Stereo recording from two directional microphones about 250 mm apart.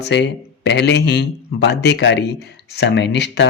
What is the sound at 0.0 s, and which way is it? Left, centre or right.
Speech, left.